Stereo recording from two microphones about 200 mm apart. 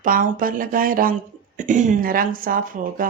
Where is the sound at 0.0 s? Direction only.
45° right (ahead or behind).